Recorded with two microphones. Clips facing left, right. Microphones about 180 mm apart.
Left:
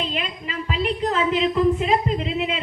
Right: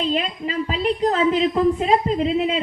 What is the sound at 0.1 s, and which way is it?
A woman's voice, 35° right (ahead or behind).